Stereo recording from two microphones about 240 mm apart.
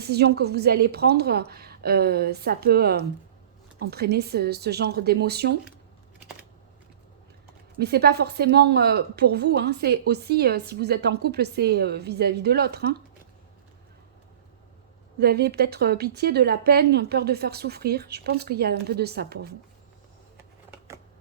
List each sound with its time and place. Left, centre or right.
0.0 s a woman's voice: right
7.8 s a woman's voice: right
15.2 s a woman's voice: right
20.3 s a sound: centre